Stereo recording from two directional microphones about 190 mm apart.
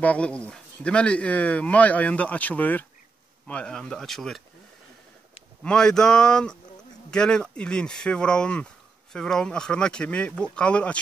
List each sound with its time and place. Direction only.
0.0 s speech: 5° left (ahead or behind)
5.6 s speech: 5° left (ahead or behind)